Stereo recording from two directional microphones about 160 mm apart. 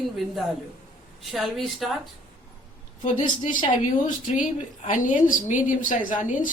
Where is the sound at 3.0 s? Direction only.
50° left (ahead or behind).